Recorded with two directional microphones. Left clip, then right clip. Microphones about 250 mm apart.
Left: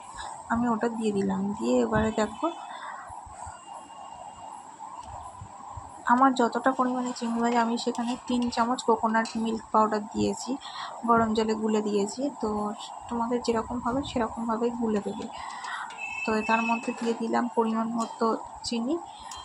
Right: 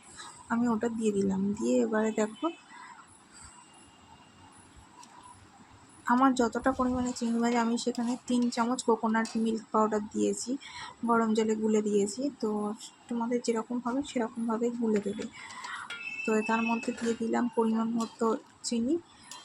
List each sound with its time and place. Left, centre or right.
0.4 s speech: centre
6.1 s speech: centre